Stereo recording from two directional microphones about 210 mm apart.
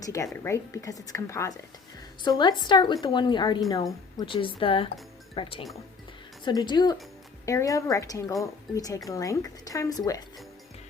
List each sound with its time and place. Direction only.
0.0 s a woman's voice: 15° left (ahead or behind)